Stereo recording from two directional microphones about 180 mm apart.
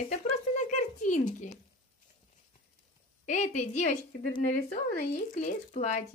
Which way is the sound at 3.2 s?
45° left (ahead or behind).